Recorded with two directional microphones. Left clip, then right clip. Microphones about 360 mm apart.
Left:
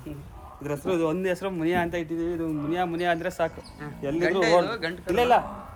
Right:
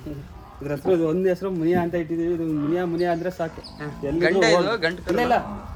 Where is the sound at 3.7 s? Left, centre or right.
Centre.